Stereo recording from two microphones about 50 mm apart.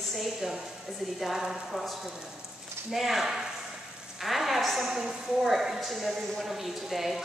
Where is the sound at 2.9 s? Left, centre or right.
Centre.